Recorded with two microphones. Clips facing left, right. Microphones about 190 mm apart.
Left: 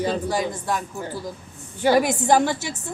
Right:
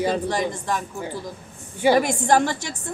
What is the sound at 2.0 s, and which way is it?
Speech, 5° left (ahead or behind).